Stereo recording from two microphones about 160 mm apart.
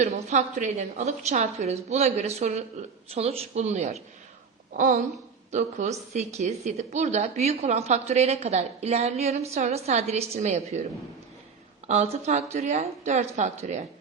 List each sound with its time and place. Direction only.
0.0 s a woman's voice: 45° right (ahead or behind)
11.9 s a woman's voice: 40° right (ahead or behind)